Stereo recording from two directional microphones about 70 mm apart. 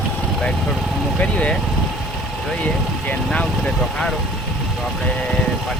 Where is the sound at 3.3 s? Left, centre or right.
Centre.